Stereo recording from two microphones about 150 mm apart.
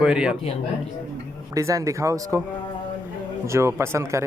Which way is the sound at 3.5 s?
20° right (ahead or behind).